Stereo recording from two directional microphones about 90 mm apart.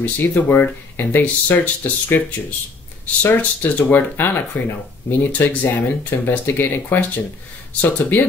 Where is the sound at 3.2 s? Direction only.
20° left (ahead or behind).